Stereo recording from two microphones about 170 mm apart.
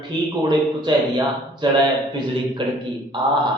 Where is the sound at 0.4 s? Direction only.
25° right (ahead or behind).